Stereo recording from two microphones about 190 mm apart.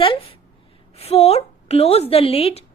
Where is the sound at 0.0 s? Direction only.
30° left (ahead or behind).